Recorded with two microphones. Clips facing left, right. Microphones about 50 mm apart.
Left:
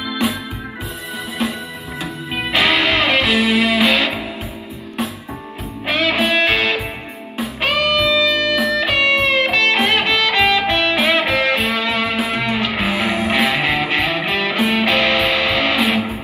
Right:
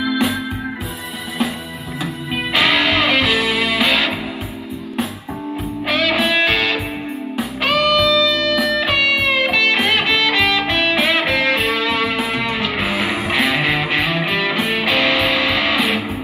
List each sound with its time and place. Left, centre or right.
0.0 s music: centre
2.3 s music: centre
5.9 s music: centre
7.7 s music: left
8.5 s music: centre